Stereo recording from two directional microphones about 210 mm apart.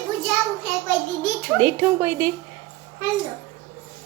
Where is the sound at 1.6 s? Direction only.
10° right (ahead or behind).